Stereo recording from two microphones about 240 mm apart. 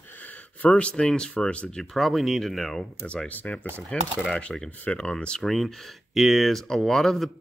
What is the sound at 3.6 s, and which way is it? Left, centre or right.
Speech, centre.